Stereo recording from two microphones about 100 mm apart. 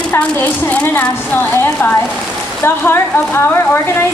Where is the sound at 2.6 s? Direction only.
20° left (ahead or behind).